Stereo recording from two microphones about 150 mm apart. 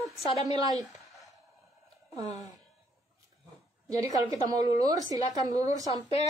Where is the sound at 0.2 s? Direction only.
40° left (ahead or behind).